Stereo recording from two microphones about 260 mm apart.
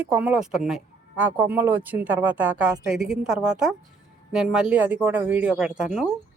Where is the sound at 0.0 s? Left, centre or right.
Centre.